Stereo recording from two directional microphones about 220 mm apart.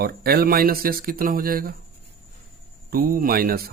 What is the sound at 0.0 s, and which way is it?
Speech, 45° right (ahead or behind).